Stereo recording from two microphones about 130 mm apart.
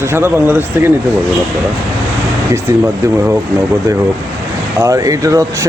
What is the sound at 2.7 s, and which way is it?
Speech, 25° right (ahead or behind).